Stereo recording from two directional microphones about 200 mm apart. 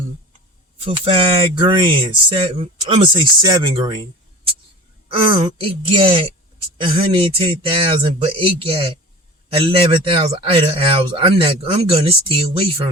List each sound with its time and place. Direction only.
0.9 s speech: 25° right (ahead or behind)
5.0 s speech: 25° right (ahead or behind)